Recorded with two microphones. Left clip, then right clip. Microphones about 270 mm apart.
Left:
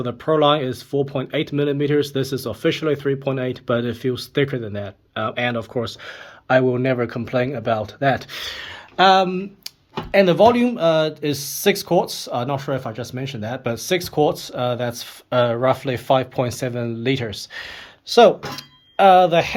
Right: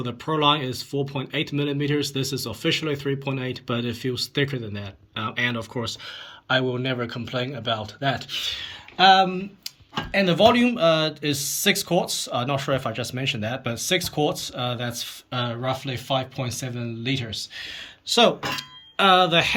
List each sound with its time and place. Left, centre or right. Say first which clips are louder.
0.0 s speech: left 5 dB; centre